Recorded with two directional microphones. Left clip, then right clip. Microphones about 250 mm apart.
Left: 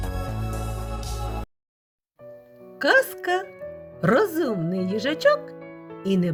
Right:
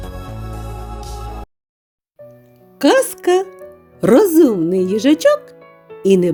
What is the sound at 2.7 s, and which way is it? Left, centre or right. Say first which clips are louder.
Speech: right 6 dB; right.